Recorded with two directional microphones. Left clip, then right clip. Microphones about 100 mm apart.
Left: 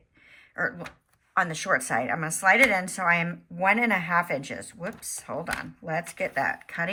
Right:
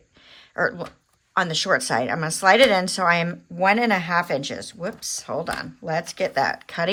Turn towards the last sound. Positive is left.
turn(degrees=-25)  # may be behind; listen again after turning